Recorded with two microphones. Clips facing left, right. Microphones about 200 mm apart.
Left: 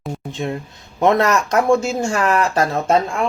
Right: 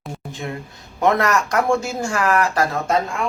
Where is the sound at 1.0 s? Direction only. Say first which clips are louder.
Left 3 dB; 25° left (ahead or behind).